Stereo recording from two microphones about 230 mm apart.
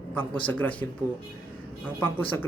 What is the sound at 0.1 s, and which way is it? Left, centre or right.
Speech, centre.